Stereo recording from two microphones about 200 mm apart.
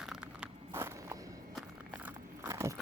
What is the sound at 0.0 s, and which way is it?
Walk, 5° right (ahead or behind).